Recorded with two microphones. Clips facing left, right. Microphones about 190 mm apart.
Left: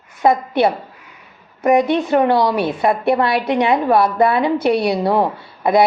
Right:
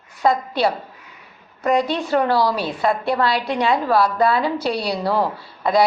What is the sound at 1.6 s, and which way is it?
A woman's voice, 20° left (ahead or behind).